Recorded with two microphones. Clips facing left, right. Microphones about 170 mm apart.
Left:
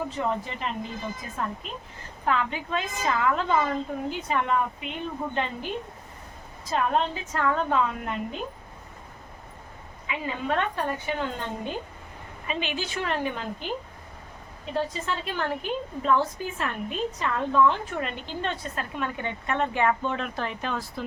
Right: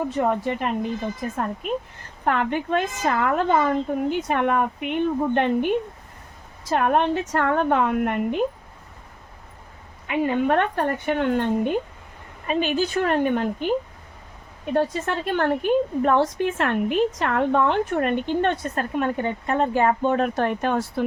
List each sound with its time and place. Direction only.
0.2 s a woman's voice: 55° right (ahead or behind)
10.1 s a woman's voice: 60° right (ahead or behind)
12.5 s a woman's voice: 45° right (ahead or behind)
14.7 s a woman's voice: 55° right (ahead or behind)